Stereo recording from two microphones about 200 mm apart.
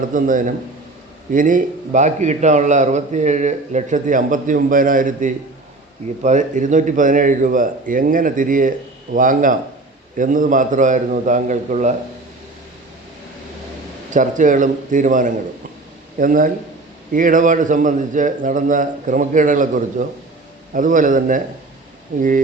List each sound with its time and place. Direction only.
0.1 s a man's voice: 40° right (ahead or behind)
14.1 s a man's voice: 40° right (ahead or behind)